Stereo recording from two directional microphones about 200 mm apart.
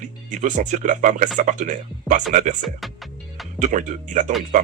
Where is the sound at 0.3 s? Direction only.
40° right (ahead or behind).